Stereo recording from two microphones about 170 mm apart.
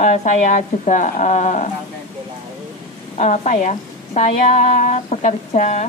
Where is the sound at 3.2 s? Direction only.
45° left (ahead or behind).